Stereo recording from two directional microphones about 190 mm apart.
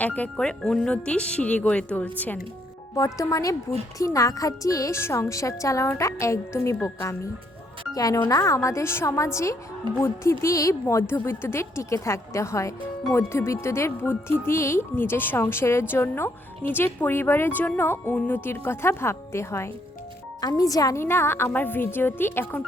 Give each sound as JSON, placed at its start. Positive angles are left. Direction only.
{"t": 0.0, "sound": "speech", "side_deg": 10}